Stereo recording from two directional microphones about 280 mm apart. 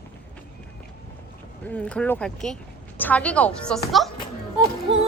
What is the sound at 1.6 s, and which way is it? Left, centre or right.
Speech, centre.